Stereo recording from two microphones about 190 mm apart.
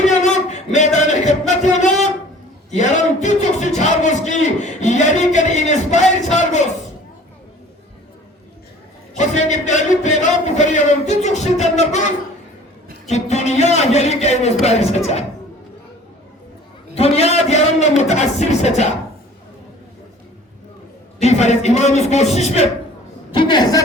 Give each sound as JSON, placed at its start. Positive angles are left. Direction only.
{"t": 0.0, "sound": "music", "side_deg": 40}
{"t": 2.6, "sound": "a man's voice", "side_deg": 40}
{"t": 9.1, "sound": "a man's voice", "side_deg": 40}
{"t": 16.9, "sound": "a man's voice", "side_deg": 30}
{"t": 21.2, "sound": "a man's voice", "side_deg": 35}
{"t": 23.3, "sound": "a woman's voice", "side_deg": 25}